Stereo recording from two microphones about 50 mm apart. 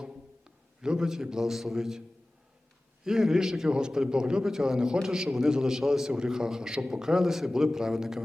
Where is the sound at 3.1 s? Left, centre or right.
Centre.